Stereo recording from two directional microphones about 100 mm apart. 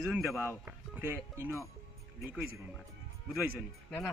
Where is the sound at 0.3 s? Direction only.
25° left (ahead or behind).